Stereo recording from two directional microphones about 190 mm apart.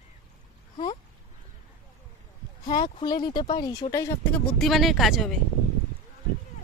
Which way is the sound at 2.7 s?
20° left (ahead or behind).